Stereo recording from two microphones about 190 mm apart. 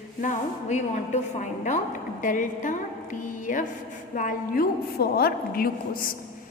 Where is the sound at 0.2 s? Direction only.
40° left (ahead or behind).